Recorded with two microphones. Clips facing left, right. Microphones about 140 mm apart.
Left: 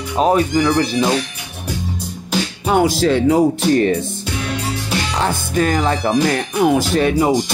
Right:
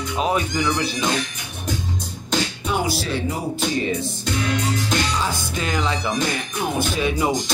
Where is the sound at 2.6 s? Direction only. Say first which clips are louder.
Left 14 dB; 90° left; by 3.9 s 75° left (ahead or behind).